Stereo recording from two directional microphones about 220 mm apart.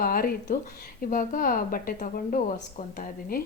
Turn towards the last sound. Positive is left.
turn(degrees=35)  # may be behind; listen again after turning